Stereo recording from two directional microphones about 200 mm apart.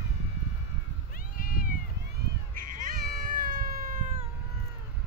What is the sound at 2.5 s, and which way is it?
Cat, 40° right (ahead or behind).